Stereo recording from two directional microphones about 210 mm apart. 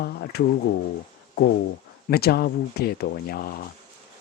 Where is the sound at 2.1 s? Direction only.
50° left (ahead or behind).